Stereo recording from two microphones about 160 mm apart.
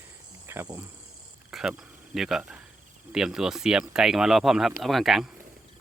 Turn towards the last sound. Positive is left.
turn(degrees=0)  # may be behind; listen again after turning